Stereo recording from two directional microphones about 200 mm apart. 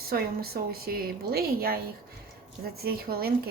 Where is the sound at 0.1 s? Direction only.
50° right (ahead or behind).